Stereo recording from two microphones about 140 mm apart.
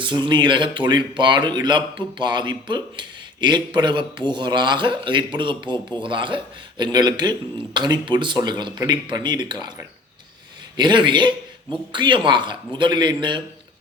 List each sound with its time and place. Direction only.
0.0 s speech: 35° right (ahead or behind)
10.8 s speech: 35° right (ahead or behind)